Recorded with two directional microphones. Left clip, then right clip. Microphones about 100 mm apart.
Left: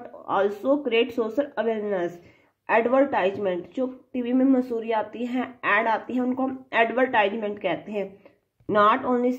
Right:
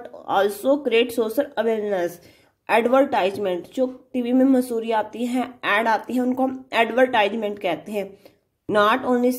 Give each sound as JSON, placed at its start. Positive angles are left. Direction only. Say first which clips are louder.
{"t": 0.3, "sound": "speech", "louder": "right 3 dB", "side_deg": -25}